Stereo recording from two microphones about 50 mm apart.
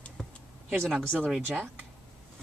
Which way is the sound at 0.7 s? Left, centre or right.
Centre.